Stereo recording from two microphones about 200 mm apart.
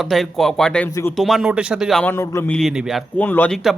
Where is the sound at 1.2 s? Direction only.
Centre (ahead or behind).